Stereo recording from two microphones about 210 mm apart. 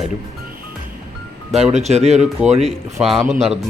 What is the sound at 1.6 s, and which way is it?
Speech, 30° right (ahead or behind).